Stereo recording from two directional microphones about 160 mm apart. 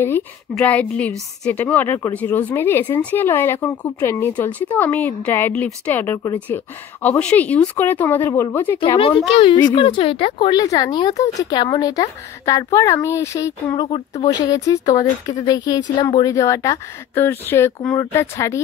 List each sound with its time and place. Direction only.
0.6 s a woman's voice: 10° left (ahead or behind)
8.7 s a woman's voice: 30° left (ahead or behind)
13.8 s speech: 35° left (ahead or behind); by 18.6 s 15° left (ahead or behind)